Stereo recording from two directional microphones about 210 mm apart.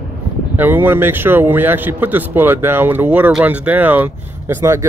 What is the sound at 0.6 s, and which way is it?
A man's voice, 10° right (ahead or behind).